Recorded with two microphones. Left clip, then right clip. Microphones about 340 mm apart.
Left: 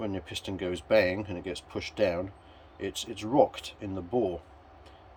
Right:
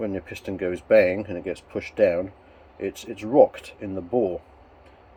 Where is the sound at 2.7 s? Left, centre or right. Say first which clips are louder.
Right 4 dB; centre.